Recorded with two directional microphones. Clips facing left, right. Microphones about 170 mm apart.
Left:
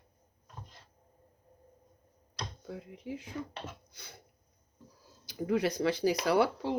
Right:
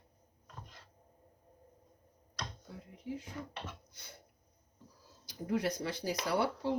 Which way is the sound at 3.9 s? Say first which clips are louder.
Left 2 dB; 90° left.